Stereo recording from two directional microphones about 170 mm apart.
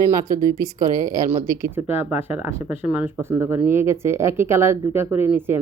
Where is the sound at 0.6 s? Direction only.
20° right (ahead or behind).